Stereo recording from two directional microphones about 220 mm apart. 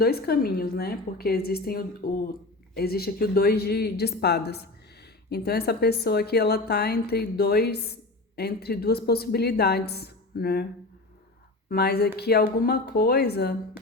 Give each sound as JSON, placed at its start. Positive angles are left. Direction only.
{"t": 0.0, "sound": "speech", "side_deg": 45}
{"t": 11.7, "sound": "speech", "side_deg": 45}